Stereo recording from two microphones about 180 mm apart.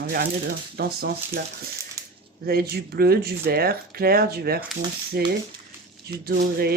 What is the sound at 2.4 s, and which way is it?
Speech, 60° right (ahead or behind).